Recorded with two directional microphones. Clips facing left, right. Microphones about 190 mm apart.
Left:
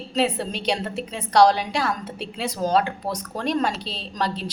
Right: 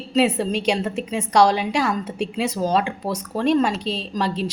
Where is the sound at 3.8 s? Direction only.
40° right (ahead or behind).